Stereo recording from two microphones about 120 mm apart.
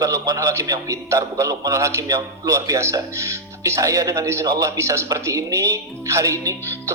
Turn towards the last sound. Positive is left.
turn(degrees=-25)  # may be behind; listen again after turning